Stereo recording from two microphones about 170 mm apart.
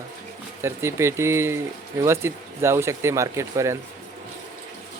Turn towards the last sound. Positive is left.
turn(degrees=-15)  # may be behind; listen again after turning